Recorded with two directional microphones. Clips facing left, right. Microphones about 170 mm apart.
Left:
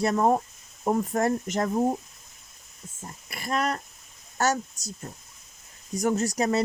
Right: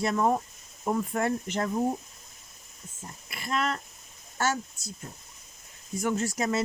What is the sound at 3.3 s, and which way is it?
Speech, 40° left (ahead or behind).